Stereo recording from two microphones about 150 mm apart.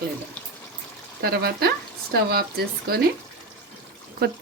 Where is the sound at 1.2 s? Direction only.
90° right.